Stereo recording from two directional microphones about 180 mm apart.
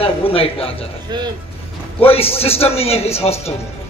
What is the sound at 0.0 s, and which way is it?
Speech, 30° left (ahead or behind).